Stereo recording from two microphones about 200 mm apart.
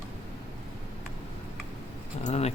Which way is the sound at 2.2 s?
35° left (ahead or behind).